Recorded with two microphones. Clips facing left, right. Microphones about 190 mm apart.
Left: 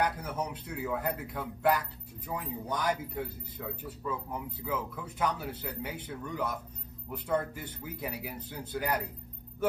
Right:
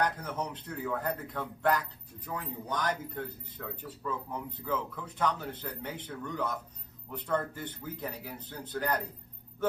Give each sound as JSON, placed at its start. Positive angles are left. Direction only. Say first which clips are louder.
{"t": 0.0, "sound": "speech", "louder": "even", "side_deg": 10}